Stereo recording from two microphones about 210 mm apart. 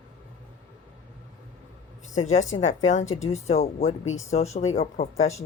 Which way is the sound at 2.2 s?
35° left (ahead or behind).